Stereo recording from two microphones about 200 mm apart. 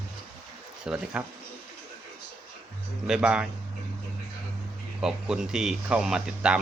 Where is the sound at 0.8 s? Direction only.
5° right (ahead or behind).